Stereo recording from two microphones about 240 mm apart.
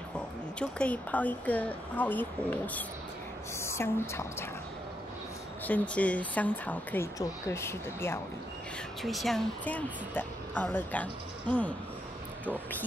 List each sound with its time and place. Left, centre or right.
0.6 s speech: centre
5.7 s speech: centre
9.0 s speech: centre